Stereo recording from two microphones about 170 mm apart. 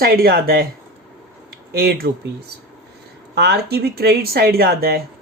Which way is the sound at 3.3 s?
70° right (ahead or behind).